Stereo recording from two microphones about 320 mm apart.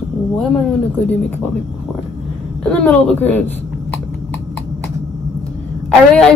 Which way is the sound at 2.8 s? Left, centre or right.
Centre.